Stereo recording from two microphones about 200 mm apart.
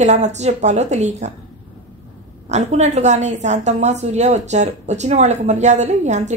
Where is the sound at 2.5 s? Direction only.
35° right (ahead or behind).